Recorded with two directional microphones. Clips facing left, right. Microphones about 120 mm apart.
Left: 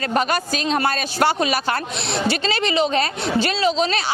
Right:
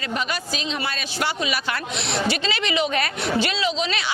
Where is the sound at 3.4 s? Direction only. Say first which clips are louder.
Left 4 dB; 40° left (ahead or behind).